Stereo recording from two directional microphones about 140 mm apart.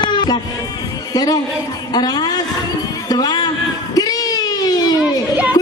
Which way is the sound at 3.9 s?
25° left (ahead or behind).